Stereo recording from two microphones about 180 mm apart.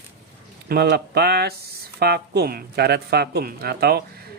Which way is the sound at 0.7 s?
65° right (ahead or behind).